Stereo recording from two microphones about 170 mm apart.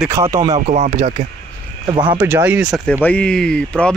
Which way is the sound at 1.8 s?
30° right (ahead or behind).